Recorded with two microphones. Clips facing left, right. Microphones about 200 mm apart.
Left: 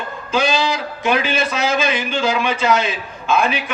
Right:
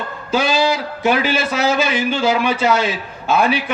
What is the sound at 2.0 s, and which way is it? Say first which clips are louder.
Speech: right 2 dB; 40° right (ahead or behind).